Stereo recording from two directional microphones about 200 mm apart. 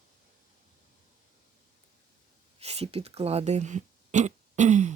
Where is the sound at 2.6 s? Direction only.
30° right (ahead or behind).